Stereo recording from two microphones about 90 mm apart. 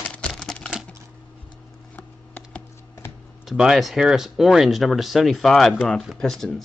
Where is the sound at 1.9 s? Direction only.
15° left (ahead or behind).